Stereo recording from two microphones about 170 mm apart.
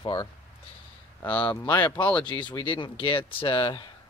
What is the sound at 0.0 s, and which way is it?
Speech, 25° left (ahead or behind).